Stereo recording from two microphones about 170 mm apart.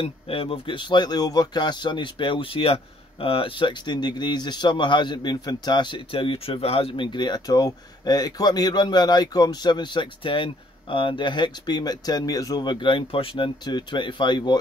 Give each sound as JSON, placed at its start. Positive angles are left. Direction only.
{"t": 0.0, "sound": "speech", "side_deg": 35}